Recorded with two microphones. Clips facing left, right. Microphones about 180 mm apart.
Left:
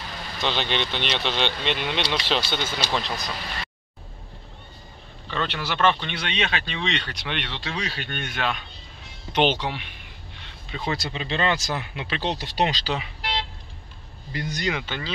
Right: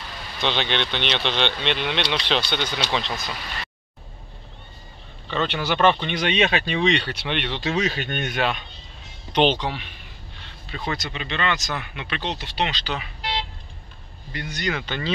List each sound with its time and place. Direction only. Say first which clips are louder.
0.4 s speech: right 2 dB; centre (ahead or behind)
5.3 s speech: right 4 dB; 5° right (ahead or behind)
7.6 s speech: right 7 dB; 20° right (ahead or behind)
9.3 s speech: right 2 dB; 10° left (ahead or behind)
10.9 s speech: left 1 dB; 30° left (ahead or behind)
14.3 s speech: left 2 dB; 35° left (ahead or behind)
14.7 s speech: right 2 dB; 10° left (ahead or behind)